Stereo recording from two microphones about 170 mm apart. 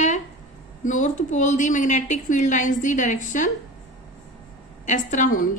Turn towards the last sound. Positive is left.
turn(degrees=50)  # may be behind; listen again after turning